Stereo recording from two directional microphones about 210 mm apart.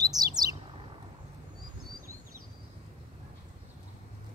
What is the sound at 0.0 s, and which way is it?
Bird, 20° right (ahead or behind).